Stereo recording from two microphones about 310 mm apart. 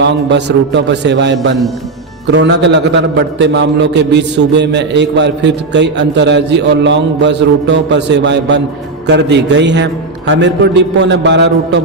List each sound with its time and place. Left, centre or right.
0.0 s a man's voice: right